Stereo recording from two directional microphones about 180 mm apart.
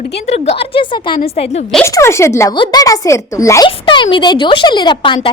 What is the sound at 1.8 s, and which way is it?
A woman's voice, 15° left (ahead or behind).